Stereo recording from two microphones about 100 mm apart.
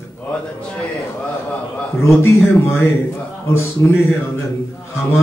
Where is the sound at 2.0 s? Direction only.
25° left (ahead or behind).